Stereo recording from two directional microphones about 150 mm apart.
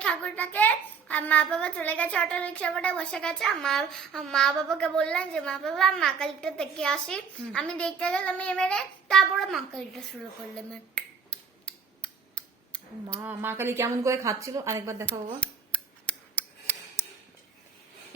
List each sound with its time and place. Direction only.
0.0 s a child's voice: 10° left (ahead or behind)
10.5 s finger snapping: 5° left (ahead or behind)
13.2 s a woman's voice: 15° right (ahead or behind)
15.4 s scissors: 10° left (ahead or behind)